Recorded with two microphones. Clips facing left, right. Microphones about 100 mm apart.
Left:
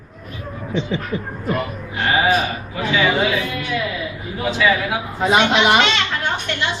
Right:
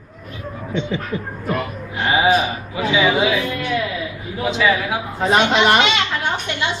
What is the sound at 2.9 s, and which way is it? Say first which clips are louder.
Speech: right 1 dB; 10° right (ahead or behind).